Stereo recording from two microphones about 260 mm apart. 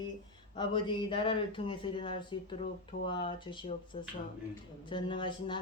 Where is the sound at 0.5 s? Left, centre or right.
Centre.